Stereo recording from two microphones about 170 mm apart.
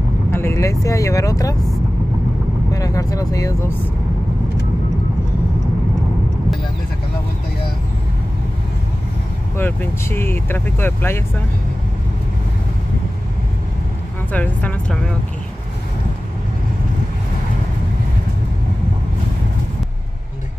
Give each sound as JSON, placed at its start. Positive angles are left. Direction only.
{"t": 0.3, "sound": "speech", "side_deg": 15}
{"t": 2.7, "sound": "speech", "side_deg": 20}
{"t": 9.6, "sound": "speech", "side_deg": 10}
{"t": 14.3, "sound": "speech", "side_deg": 10}